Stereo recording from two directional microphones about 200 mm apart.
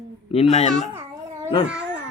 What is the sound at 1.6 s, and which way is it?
Cat, 5° right (ahead or behind).